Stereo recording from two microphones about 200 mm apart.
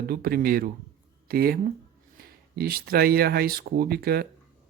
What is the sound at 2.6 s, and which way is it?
Speech, 50° right (ahead or behind).